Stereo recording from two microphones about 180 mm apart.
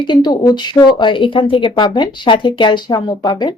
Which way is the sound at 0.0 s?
25° left (ahead or behind).